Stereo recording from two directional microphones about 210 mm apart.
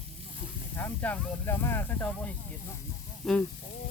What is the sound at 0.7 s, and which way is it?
Speech, 10° left (ahead or behind).